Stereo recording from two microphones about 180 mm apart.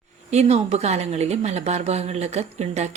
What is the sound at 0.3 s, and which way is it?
A woman's voice, 35° right (ahead or behind).